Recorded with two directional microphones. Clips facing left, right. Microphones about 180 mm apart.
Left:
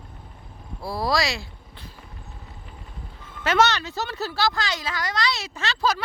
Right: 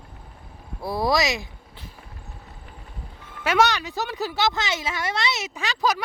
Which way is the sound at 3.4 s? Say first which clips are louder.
Even; 10° right (ahead or behind).